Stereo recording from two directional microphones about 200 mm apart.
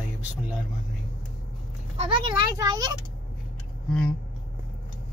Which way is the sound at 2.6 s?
20° right (ahead or behind).